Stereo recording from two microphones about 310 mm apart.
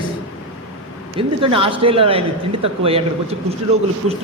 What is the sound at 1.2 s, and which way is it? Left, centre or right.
A man's voice, centre.